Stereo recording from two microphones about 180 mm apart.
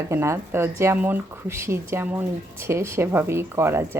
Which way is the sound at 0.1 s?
15° right (ahead or behind).